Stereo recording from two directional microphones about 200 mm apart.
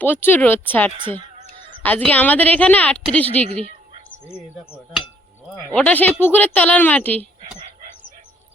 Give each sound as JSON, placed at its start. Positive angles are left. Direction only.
{"t": 0.0, "sound": "a woman's voice", "side_deg": 10}
{"t": 5.7, "sound": "a woman's voice", "side_deg": 5}